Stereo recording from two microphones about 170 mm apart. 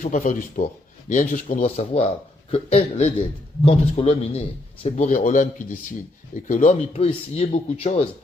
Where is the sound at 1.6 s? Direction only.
40° left (ahead or behind).